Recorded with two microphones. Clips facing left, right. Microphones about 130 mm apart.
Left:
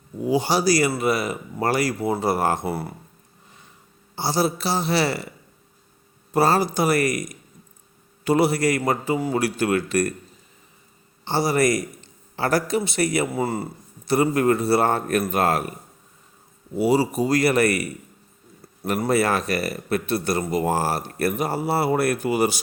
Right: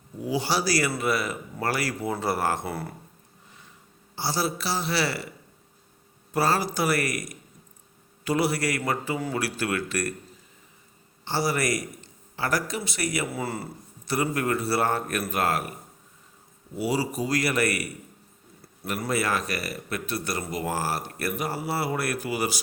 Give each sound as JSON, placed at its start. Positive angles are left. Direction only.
{"t": 0.3, "sound": "speech", "side_deg": 20}
{"t": 4.1, "sound": "a man's voice", "side_deg": 20}
{"t": 6.3, "sound": "a man's voice", "side_deg": 25}
{"t": 11.3, "sound": "a man's voice", "side_deg": 25}
{"t": 16.7, "sound": "a man's voice", "side_deg": 25}
{"t": 18.8, "sound": "speech", "side_deg": 45}
{"t": 19.1, "sound": "a man's voice", "side_deg": 30}